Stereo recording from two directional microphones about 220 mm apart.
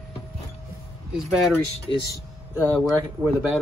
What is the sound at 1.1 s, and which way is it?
Speech, centre (ahead or behind).